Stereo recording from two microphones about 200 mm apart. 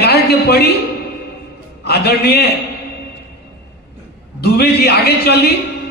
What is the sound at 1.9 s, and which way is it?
Speech, 55° left (ahead or behind).